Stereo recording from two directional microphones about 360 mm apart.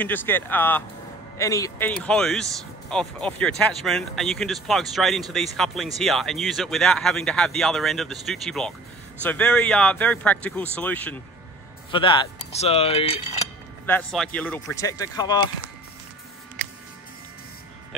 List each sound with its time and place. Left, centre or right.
0.0 s speech: centre
13.8 s speech: centre